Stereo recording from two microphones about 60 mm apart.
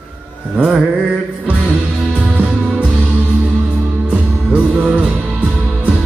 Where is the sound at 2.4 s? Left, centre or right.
Centre.